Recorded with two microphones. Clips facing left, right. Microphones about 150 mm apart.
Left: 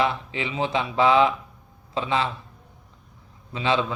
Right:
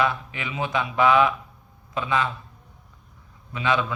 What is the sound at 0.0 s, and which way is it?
A man's voice, 25° left (ahead or behind).